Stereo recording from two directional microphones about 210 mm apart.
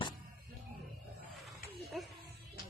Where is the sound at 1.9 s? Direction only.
Centre (ahead or behind).